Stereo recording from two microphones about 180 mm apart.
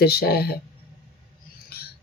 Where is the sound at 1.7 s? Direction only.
60° left (ahead or behind).